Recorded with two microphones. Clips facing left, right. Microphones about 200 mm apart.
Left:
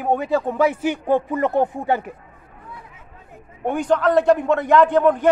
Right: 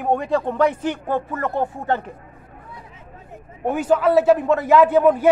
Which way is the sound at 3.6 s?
5° right (ahead or behind).